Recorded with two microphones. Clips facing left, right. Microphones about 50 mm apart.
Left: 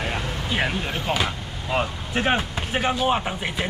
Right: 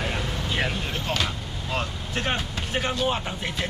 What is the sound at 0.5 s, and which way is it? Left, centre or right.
Speech, centre.